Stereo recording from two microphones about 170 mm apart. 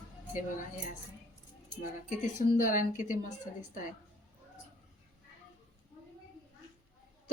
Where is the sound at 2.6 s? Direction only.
50° left (ahead or behind).